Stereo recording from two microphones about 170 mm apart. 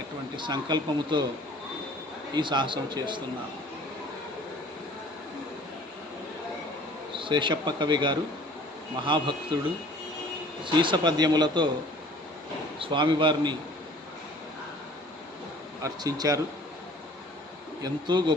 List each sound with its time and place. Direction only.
0.3 s a man's voice: 25° right (ahead or behind)
2.3 s a man's voice: 25° right (ahead or behind)
7.2 s a man's voice: 30° right (ahead or behind)
10.6 s a man's voice: 30° right (ahead or behind)
12.8 s a man's voice: 30° right (ahead or behind)
15.8 s a man's voice: 20° right (ahead or behind)
17.8 s a man's voice: 25° right (ahead or behind)